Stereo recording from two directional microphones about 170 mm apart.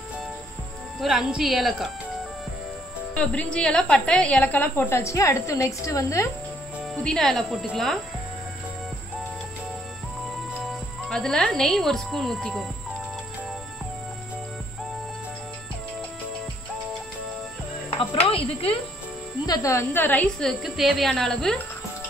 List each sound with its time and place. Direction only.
0.9 s a woman's voice: 5° right (ahead or behind)
3.2 s a woman's voice: 5° left (ahead or behind)
6.8 s a woman's voice: 5° left (ahead or behind)
10.6 s a woman's voice: centre (ahead or behind)
18.3 s speech: 35° left (ahead or behind)
19.4 s a woman's voice: 20° left (ahead or behind); by 21.5 s centre (ahead or behind)